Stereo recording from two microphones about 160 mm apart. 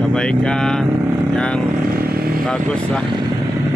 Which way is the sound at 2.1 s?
70° right (ahead or behind).